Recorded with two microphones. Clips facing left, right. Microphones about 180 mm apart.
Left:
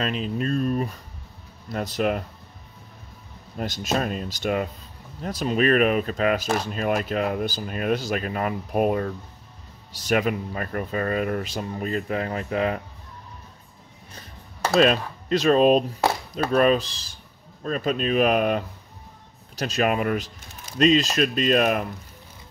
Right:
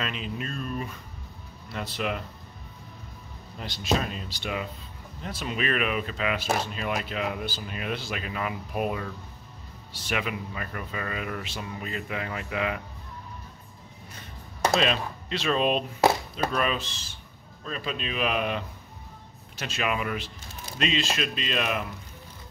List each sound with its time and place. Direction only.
0.0 s speech: 40° left (ahead or behind)
3.5 s speech: 45° left (ahead or behind)
14.8 s speech: 45° left (ahead or behind)